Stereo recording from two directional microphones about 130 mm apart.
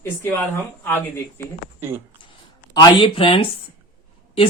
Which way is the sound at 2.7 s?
35° left (ahead or behind).